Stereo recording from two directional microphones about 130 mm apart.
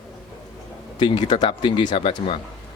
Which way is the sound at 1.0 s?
35° left (ahead or behind).